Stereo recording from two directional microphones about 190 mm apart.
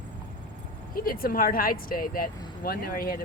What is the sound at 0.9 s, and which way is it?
Speech, 50° left (ahead or behind).